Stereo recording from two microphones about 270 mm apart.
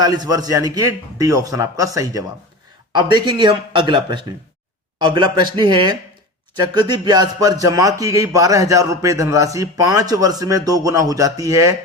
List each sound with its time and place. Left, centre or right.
0.0 s a man's voice: centre